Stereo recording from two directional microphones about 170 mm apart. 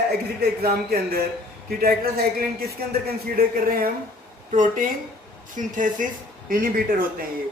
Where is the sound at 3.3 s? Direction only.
60° right (ahead or behind).